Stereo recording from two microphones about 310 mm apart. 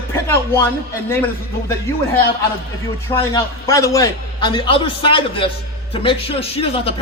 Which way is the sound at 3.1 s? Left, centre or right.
Centre.